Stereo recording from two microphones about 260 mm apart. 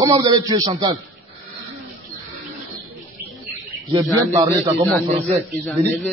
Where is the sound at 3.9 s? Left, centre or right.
Centre.